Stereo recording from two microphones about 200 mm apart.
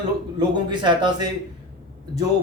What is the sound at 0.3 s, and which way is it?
Speech, 25° right (ahead or behind).